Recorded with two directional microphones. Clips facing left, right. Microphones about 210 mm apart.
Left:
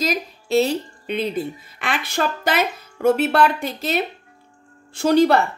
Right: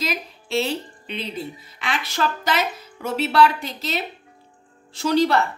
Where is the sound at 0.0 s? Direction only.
40° left (ahead or behind).